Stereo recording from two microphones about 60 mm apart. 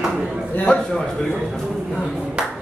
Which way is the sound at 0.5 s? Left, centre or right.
Left.